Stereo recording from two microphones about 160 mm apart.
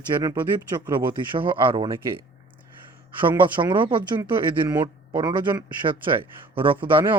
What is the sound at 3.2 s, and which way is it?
Speech, 30° right (ahead or behind).